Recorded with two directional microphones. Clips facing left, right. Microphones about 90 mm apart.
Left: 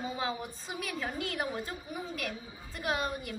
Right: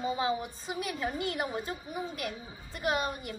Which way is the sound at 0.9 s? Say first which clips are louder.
Right 2 dB; 15° right (ahead or behind).